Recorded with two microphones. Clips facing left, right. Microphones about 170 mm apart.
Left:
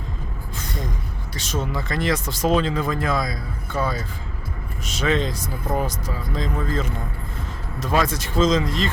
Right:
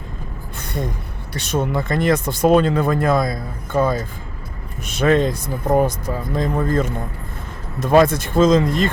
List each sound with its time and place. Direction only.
0.6 s gasp: 60° right (ahead or behind)
1.3 s speech: 60° right (ahead or behind)